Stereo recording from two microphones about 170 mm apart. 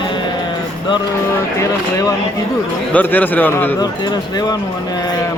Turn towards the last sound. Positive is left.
turn(degrees=25)  # may be behind; listen again after turning